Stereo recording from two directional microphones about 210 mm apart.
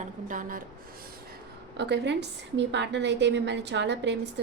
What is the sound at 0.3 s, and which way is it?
Speech, 40° right (ahead or behind).